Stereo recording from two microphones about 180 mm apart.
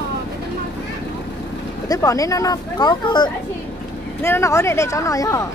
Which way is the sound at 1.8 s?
20° left (ahead or behind).